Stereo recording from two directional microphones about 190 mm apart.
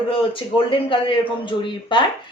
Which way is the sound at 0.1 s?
25° left (ahead or behind).